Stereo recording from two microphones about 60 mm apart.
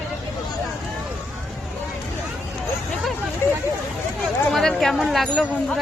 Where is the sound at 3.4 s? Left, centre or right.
Left.